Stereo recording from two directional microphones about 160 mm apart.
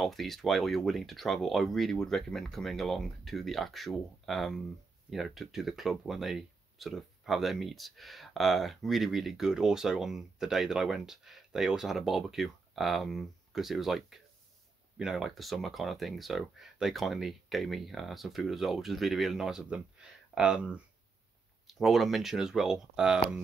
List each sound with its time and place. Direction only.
0.0 s speech: centre (ahead or behind)